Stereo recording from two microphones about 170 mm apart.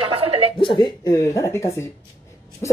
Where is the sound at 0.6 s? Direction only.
30° left (ahead or behind).